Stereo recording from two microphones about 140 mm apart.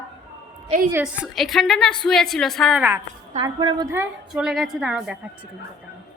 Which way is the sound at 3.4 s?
30° right (ahead or behind).